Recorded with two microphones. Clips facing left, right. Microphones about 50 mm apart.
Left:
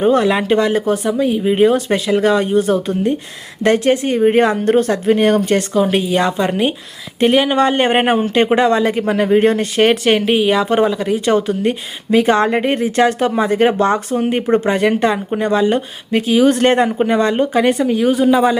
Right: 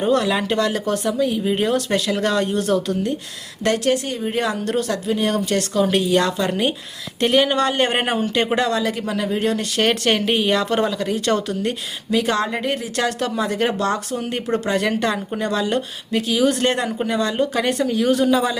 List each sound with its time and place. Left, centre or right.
0.0 s speech: left
5.1 s speech: left
5.7 s speech: centre
7.7 s speech: left
9.8 s speech: centre
12.1 s speech: left; by 18.3 s centre